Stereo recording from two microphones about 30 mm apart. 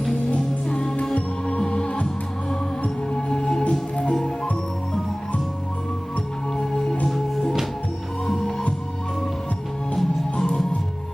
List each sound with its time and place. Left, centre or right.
0.7 s music: left
1.1 s music: left
3.2 s music: left
3.7 s music: left
8.3 s music: centre